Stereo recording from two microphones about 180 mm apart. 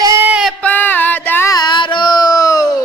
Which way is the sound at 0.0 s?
15° right (ahead or behind).